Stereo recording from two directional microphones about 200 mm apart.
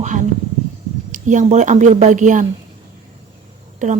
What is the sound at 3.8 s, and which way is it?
Speech, 40° right (ahead or behind).